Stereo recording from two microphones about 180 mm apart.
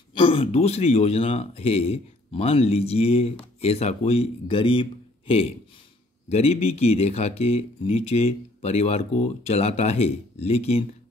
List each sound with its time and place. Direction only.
0.1 s speech: 30° left (ahead or behind)